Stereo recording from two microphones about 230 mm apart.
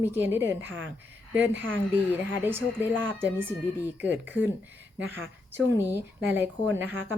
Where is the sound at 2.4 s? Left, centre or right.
Centre.